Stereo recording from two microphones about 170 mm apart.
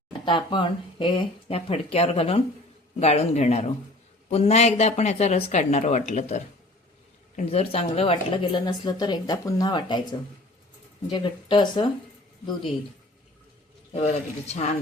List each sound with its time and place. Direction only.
0.3 s speech: 30° left (ahead or behind)
13.9 s speech: 40° left (ahead or behind)